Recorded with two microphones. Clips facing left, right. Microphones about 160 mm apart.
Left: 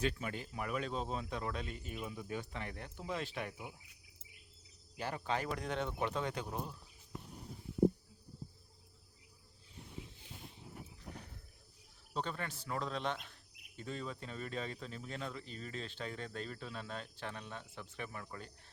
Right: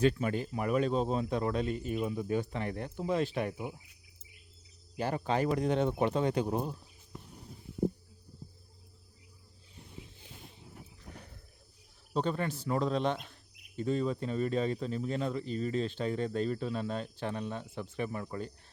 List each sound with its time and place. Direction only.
0.0 s speech: 45° right (ahead or behind)
4.9 s a man's voice: 40° right (ahead or behind)
12.1 s a man's voice: 30° right (ahead or behind)